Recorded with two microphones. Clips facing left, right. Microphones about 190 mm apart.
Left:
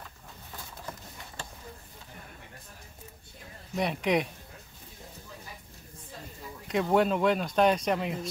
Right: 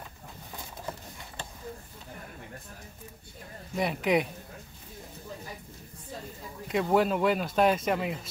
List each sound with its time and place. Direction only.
0.8 s a sound: 20° right (ahead or behind)
3.7 s speech: 5° right (ahead or behind)
6.7 s speech: centre (ahead or behind)